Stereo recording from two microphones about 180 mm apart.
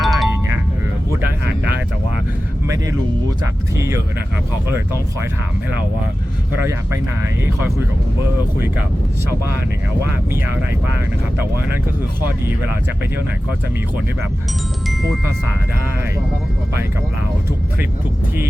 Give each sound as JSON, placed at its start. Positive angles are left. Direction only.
{"t": 0.0, "sound": "music", "side_deg": 0}
{"t": 2.6, "sound": "speech", "side_deg": -20}